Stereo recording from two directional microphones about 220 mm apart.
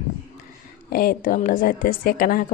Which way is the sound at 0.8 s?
40° left (ahead or behind).